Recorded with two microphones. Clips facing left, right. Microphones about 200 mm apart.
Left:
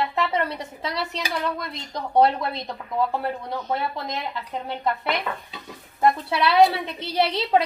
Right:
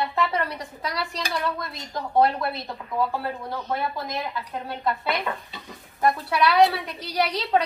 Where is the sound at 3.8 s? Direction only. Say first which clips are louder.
Even; 20° left (ahead or behind).